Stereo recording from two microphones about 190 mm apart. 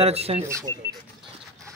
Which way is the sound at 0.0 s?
30° right (ahead or behind).